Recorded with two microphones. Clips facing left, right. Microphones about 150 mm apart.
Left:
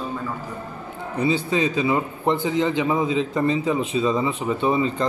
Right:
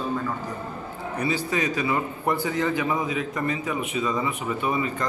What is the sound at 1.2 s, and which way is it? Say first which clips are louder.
A man's voice: left 5 dB; 25° left (ahead or behind).